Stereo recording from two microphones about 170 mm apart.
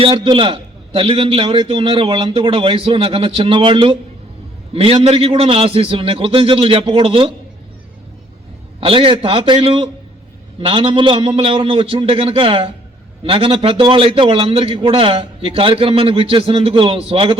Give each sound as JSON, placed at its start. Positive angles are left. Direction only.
{"t": 0.0, "sound": "a man's voice", "side_deg": -30}
{"t": 8.8, "sound": "a man's voice", "side_deg": -30}